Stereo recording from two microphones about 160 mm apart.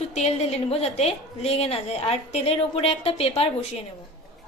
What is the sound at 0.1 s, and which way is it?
A woman's voice, 45° left (ahead or behind).